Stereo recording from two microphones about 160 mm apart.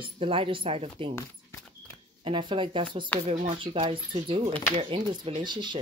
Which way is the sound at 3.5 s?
35° right (ahead or behind).